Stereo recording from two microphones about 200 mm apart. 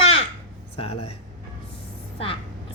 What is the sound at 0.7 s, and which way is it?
Speech, 30° left (ahead or behind).